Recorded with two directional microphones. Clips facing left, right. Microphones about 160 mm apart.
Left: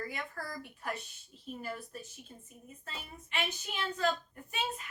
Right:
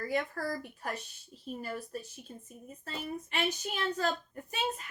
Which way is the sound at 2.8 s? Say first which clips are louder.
Right 10 dB; 40° right (ahead or behind).